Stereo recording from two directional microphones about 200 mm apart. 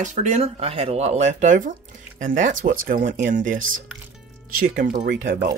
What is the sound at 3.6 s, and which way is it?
Speech, 80° right.